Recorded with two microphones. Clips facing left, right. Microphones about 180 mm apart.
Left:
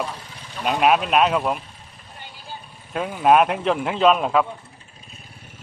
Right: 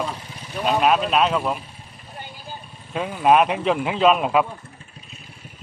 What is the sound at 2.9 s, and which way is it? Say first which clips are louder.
Speech: even; centre (ahead or behind).